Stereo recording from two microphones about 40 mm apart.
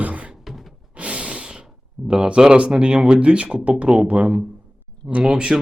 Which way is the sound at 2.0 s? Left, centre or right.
Right.